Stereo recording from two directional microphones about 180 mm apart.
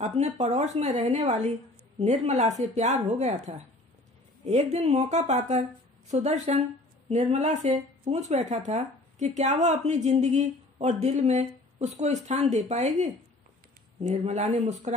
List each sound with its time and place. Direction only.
0.0 s speech: 40° right (ahead or behind)